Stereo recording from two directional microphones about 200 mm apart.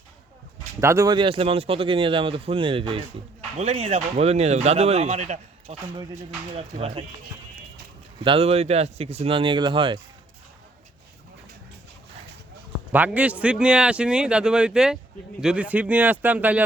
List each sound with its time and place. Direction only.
0.8 s speech: 15° right (ahead or behind); by 7.0 s 30° right (ahead or behind)
8.2 s speech: 25° right (ahead or behind)
12.9 s a man's voice: 10° right (ahead or behind)